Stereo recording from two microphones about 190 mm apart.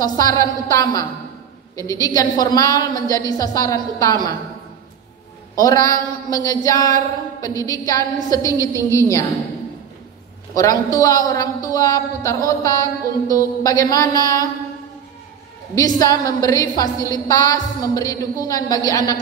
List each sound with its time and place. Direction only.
0.0 s a sound: 20° left (ahead or behind)
1.8 s a woman's voice: 20° left (ahead or behind)
5.6 s a woman's voice: 20° left (ahead or behind)
10.5 s a woman's voice: 20° left (ahead or behind)
12.4 s a sound: 15° left (ahead or behind)
15.7 s a woman's voice: 20° left (ahead or behind)